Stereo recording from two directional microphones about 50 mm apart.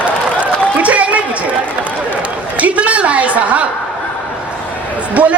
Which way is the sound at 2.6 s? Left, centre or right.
Right.